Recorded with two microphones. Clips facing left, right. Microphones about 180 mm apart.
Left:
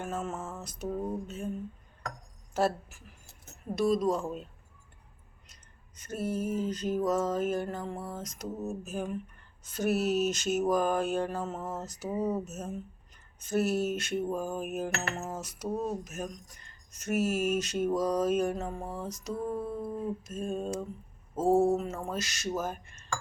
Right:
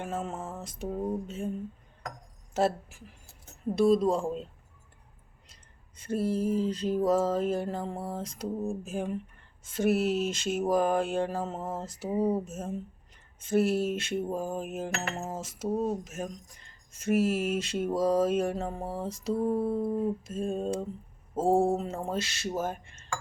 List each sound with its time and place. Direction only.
0.0 s mantra: 25° right (ahead or behind)
2.5 s speech: 25° right (ahead or behind)
3.8 s mantra: 30° right (ahead or behind)
6.0 s mantra: 30° right (ahead or behind)